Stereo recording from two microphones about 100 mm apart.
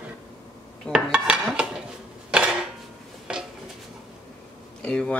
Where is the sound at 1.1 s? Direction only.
10° right (ahead or behind).